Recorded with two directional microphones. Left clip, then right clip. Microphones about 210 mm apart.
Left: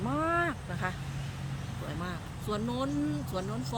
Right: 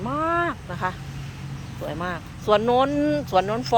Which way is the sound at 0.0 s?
15° left (ahead or behind).